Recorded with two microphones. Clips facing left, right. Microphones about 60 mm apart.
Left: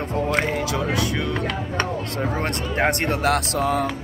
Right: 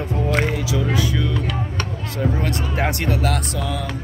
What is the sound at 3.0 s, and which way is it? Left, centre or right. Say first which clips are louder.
Speech: left 1 dB; left.